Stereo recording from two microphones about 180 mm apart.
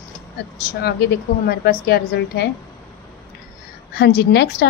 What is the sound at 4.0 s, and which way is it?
Speech, 65° left (ahead or behind).